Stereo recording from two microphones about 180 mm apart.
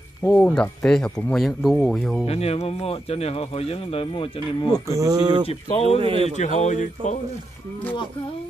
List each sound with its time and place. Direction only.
0.2 s speech: 5° left (ahead or behind)
2.2 s speech: 35° left (ahead or behind)
4.8 s speech: 20° right (ahead or behind)
5.5 s speech: 35° left (ahead or behind)
5.9 s a man's voice: 30° right (ahead or behind)
6.3 s speech: 40° left (ahead or behind)